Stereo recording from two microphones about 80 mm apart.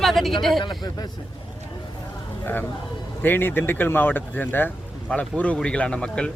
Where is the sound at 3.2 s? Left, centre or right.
Left.